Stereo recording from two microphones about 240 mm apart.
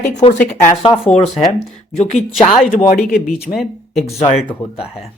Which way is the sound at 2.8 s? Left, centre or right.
Left.